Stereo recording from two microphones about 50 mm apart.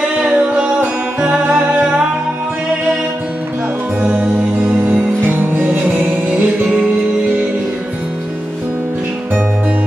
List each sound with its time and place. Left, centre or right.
1.2 s music: right
4.0 s music: right